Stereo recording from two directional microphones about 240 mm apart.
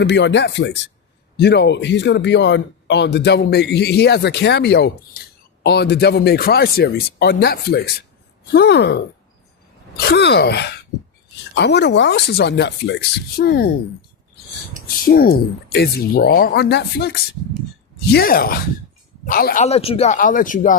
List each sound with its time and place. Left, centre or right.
0.0 s speech: left
10.1 s speech: left
14.8 s speech: left